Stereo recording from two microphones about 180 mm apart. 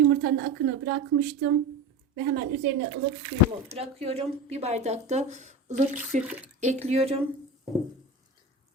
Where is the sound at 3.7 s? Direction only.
35° right (ahead or behind).